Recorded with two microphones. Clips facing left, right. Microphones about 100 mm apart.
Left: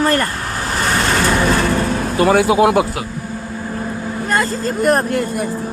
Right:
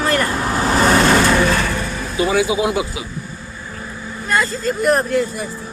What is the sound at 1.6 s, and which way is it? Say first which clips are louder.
Vehicle: left 5 dB; 35° left (ahead or behind).